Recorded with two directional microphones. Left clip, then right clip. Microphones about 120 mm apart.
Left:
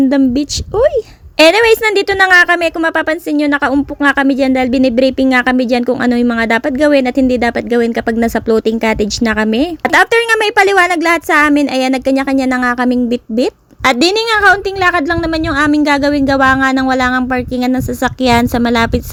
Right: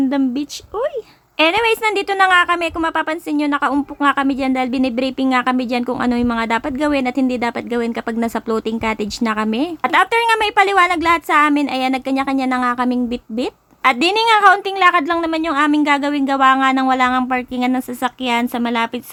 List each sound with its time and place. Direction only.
0.1 s a woman's voice: 40° left (ahead or behind)
9.8 s a woman's voice: 40° left (ahead or behind)
18.0 s a woman's voice: 45° left (ahead or behind)